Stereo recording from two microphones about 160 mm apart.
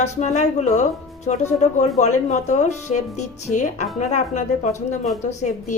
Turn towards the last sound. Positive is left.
turn(degrees=50)  # may be behind; listen again after turning